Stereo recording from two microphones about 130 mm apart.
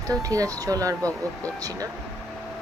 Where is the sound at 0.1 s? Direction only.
25° right (ahead or behind).